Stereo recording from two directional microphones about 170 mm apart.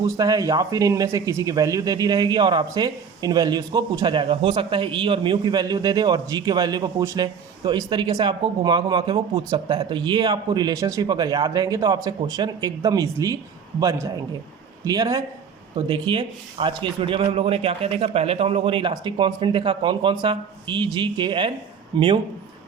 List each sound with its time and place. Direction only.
0.0 s speech: 20° right (ahead or behind)